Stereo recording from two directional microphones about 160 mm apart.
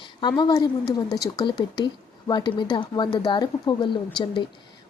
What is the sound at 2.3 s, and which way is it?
Speech, 30° left (ahead or behind).